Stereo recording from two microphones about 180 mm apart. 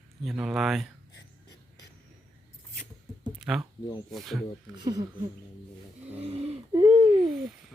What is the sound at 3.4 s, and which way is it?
Speech, 5° right (ahead or behind).